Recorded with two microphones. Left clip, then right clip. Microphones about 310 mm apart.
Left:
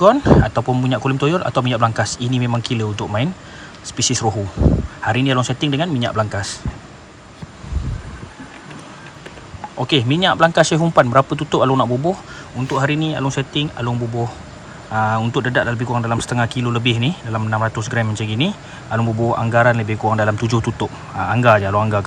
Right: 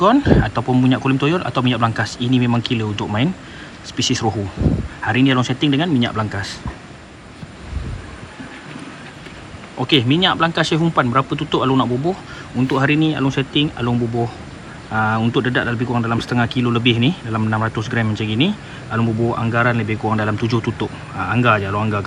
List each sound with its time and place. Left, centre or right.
0.0 s speech: centre
9.7 s speech: left